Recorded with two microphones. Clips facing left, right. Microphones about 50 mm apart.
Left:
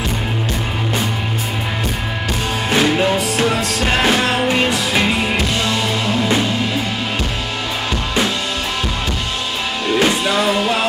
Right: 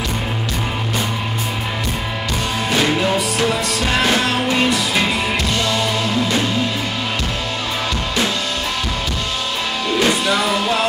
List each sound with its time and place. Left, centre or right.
2.8 s music: centre
10.0 s music: centre